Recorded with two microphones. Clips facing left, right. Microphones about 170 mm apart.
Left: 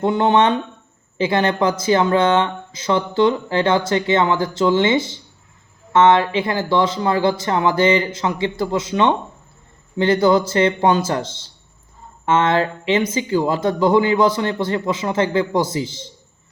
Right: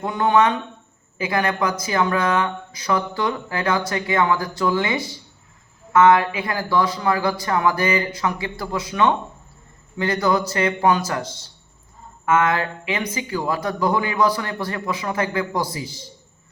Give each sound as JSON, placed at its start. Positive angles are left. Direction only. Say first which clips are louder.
{"t": 0.0, "sound": "speech", "louder": "left 3 dB", "side_deg": 25}